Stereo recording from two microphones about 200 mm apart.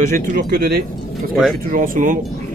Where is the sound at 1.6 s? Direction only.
45° right (ahead or behind).